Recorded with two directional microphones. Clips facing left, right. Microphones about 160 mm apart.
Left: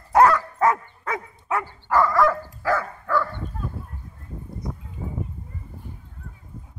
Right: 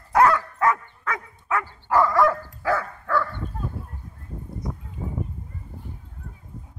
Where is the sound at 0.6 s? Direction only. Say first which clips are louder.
Left 2 dB; 25° left (ahead or behind).